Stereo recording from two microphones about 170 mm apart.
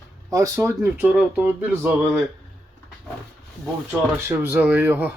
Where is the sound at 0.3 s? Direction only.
20° right (ahead or behind).